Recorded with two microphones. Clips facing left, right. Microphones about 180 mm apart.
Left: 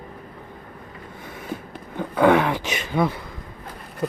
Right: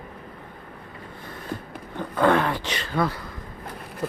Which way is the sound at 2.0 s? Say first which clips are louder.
Left 3 dB; 10° left (ahead or behind).